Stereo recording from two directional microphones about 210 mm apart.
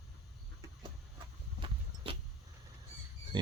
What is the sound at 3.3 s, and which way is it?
Pig, 20° right (ahead or behind).